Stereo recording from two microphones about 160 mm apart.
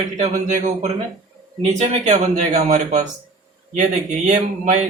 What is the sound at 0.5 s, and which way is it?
Speech, 45° right (ahead or behind).